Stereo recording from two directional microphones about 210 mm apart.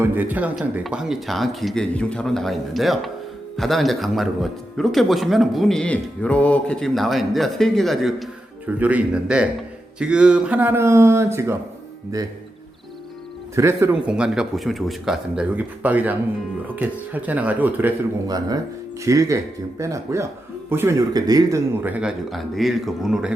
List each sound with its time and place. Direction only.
0.0 s speech: 10° right (ahead or behind)
13.6 s speech: 15° right (ahead or behind)
22.0 s speech: centre (ahead or behind)